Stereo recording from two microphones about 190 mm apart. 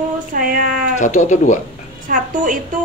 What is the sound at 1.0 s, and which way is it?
Speech, 40° left (ahead or behind).